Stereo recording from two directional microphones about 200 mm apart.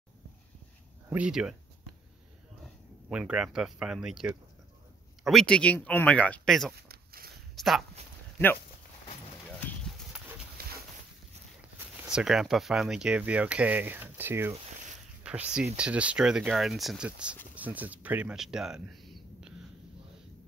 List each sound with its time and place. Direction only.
1.1 s speech: 5° right (ahead or behind)
2.6 s speech: 5° right (ahead or behind)
6.7 s a sound: 50° right (ahead or behind)
7.5 s speech: centre (ahead or behind)
10.6 s a sound: 50° right (ahead or behind)
12.1 s speech: 5° right (ahead or behind)